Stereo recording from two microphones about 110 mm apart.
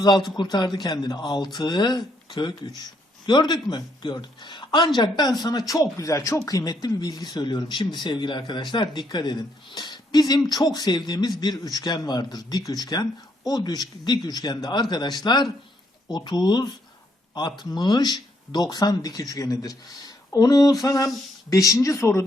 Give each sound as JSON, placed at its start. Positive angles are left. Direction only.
{"t": 0.5, "sound": "speech", "side_deg": 40}